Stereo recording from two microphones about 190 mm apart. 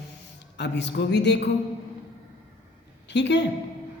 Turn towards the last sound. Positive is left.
turn(degrees=65)  # may be behind; listen again after turning